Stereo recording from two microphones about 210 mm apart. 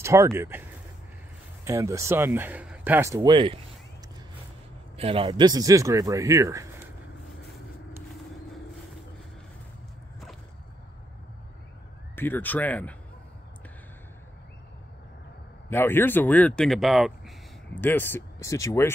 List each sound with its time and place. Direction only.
0.0 s speech: 15° right (ahead or behind)
3.3 s speech: 25° right (ahead or behind)
4.9 s speech: 30° right (ahead or behind)
12.2 s speech: 10° left (ahead or behind)
15.7 s speech: 10° left (ahead or behind)